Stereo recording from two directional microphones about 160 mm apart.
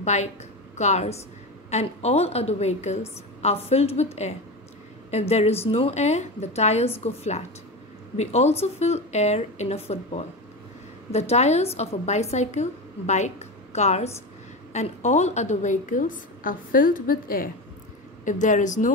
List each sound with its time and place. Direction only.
0.0 s a woman's voice: 45° left (ahead or behind); by 17.5 s 65° left (ahead or behind)
18.2 s a woman's voice: 50° left (ahead or behind)